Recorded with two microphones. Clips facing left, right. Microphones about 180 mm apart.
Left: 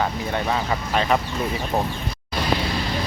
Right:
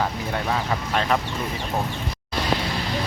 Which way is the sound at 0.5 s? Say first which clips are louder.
Even; 5° left (ahead or behind).